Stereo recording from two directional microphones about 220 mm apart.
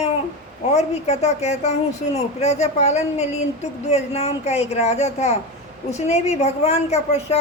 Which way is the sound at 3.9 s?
30° left (ahead or behind).